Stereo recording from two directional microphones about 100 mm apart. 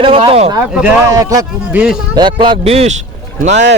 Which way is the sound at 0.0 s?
65° right (ahead or behind).